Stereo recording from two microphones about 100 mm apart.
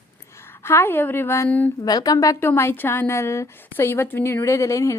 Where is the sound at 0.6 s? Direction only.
25° left (ahead or behind).